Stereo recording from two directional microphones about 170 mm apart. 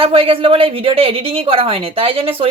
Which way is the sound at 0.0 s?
30° right (ahead or behind).